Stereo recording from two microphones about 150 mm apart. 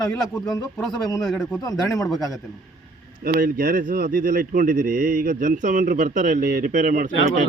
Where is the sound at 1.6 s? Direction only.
20° left (ahead or behind).